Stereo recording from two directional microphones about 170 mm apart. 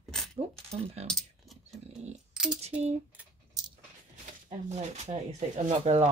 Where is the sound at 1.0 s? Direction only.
Centre (ahead or behind).